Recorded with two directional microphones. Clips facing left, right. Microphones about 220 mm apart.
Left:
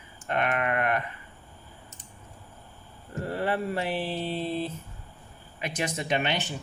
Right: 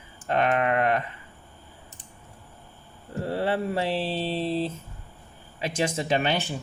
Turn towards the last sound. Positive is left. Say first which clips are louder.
# right 3 dB
turn(degrees=-35)  # may be behind; listen again after turning